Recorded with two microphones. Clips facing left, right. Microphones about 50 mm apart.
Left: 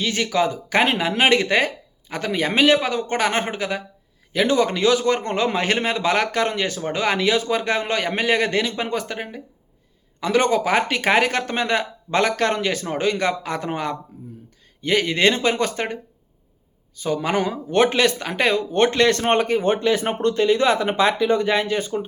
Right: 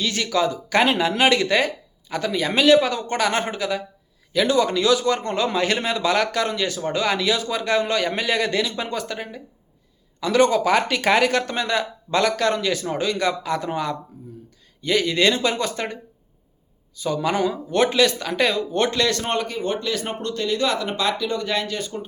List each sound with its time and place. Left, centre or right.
0.0 s a man's voice: left